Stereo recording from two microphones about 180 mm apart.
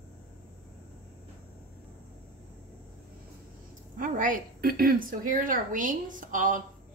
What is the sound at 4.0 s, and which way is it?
A woman's voice, 50° right (ahead or behind).